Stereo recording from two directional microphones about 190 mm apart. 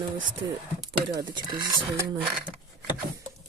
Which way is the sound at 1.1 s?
25° right (ahead or behind).